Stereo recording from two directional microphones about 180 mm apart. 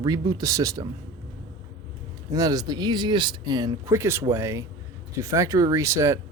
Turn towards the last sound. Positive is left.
turn(degrees=-15)  # may be behind; listen again after turning